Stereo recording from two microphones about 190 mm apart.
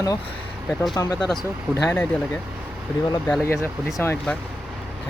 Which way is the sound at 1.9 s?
5° left (ahead or behind).